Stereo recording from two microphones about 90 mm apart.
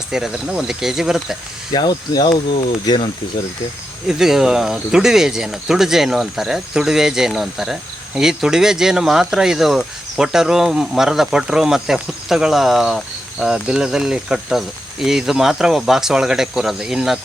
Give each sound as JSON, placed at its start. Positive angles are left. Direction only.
{"t": 0.1, "sound": "speech", "side_deg": -5}
{"t": 1.7, "sound": "speech", "side_deg": 50}
{"t": 4.2, "sound": "speech", "side_deg": -5}